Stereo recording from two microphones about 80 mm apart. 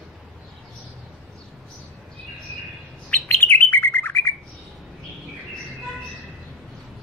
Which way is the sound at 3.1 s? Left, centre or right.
Left.